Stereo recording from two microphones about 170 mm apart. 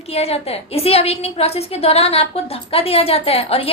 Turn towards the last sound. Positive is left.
turn(degrees=35)  # may be behind; listen again after turning